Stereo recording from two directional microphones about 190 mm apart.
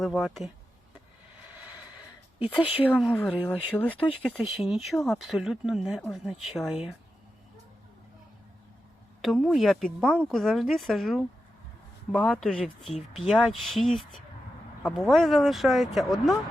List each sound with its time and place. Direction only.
0.0 s speech: centre (ahead or behind)
2.7 s speech: centre (ahead or behind)
4.1 s speech: 5° right (ahead or behind)
9.2 s speech: centre (ahead or behind)